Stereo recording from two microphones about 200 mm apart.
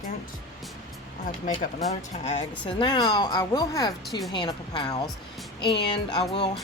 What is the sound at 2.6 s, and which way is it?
Speech, 25° left (ahead or behind).